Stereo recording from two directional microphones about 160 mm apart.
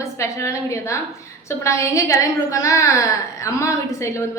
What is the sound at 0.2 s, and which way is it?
A woman's voice, 20° left (ahead or behind).